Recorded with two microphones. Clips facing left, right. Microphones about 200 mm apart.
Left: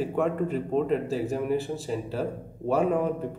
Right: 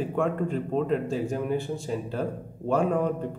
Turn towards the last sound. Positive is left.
turn(degrees=5)  # may be behind; listen again after turning